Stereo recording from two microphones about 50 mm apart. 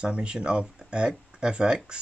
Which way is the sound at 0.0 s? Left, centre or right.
Centre.